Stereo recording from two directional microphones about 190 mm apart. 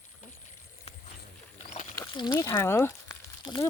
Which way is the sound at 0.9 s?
30° left (ahead or behind).